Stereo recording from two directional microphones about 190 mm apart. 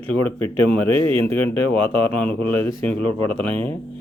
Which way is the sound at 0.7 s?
10° left (ahead or behind).